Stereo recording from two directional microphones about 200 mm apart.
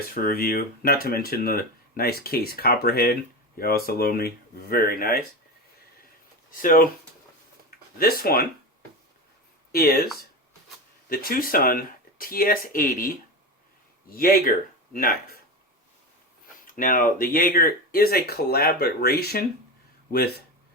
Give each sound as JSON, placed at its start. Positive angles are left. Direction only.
{"t": 0.1, "sound": "speech", "side_deg": 45}
{"t": 6.6, "sound": "speech", "side_deg": 45}
{"t": 7.9, "sound": "speech", "side_deg": 50}
{"t": 9.7, "sound": "speech", "side_deg": 50}
{"t": 11.1, "sound": "speech", "side_deg": 45}
{"t": 16.6, "sound": "speech", "side_deg": 45}